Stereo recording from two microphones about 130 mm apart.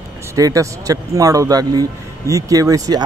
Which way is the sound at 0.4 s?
25° right (ahead or behind).